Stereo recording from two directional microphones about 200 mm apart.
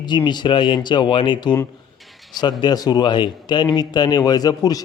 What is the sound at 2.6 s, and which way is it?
A man's voice, 20° left (ahead or behind).